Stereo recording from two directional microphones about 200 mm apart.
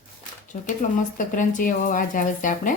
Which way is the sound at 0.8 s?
40° left (ahead or behind).